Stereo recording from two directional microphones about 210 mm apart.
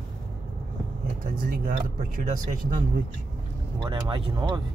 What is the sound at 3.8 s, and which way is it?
Speech, 20° right (ahead or behind).